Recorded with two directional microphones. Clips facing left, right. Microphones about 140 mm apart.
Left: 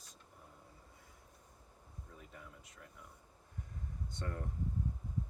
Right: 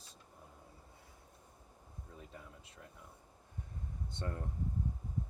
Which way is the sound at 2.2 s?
30° right (ahead or behind).